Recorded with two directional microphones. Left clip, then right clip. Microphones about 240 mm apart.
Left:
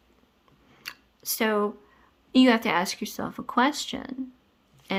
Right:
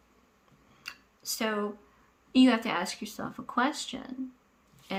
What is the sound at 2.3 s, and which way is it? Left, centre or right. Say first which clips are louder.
Speech: left 4 dB; left.